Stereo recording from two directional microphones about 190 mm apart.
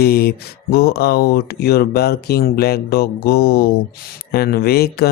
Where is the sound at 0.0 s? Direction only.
55° left (ahead or behind).